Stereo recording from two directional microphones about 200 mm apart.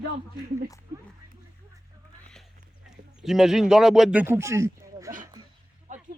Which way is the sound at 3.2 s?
Centre (ahead or behind).